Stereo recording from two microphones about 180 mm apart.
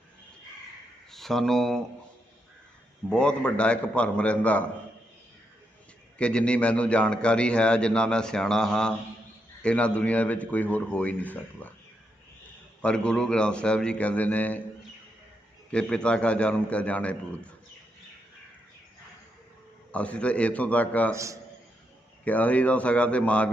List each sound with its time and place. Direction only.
1.1 s speech: centre (ahead or behind)
3.1 s speech: 5° left (ahead or behind)
6.1 s a man's voice: 5° left (ahead or behind)
12.8 s a man's voice: 5° left (ahead or behind)
15.7 s speech: 5° left (ahead or behind)
19.9 s speech: 5° left (ahead or behind)
21.1 s a man's voice: 15° right (ahead or behind)
22.2 s speech: 10° left (ahead or behind)